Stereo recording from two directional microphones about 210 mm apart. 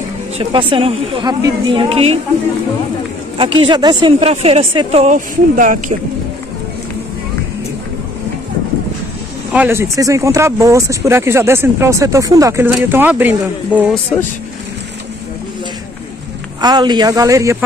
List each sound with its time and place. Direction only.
0.4 s speech: 25° right (ahead or behind)
3.6 s speech: 20° right (ahead or behind); by 5.9 s 35° right (ahead or behind)
9.5 s speech: 10° right (ahead or behind)
16.6 s speech: 20° right (ahead or behind)